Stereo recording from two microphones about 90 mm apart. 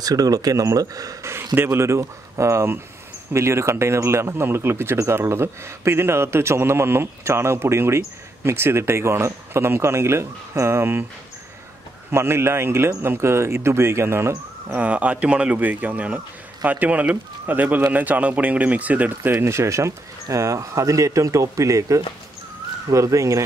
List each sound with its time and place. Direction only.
0.0 s speech: 45° right (ahead or behind)
1.3 s speech: 25° right (ahead or behind)
12.1 s speech: 30° right (ahead or behind)
14.8 s speech: 15° right (ahead or behind); by 23.4 s 35° right (ahead or behind)